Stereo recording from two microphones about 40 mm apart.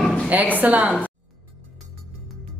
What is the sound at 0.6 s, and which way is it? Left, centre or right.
Speech, right.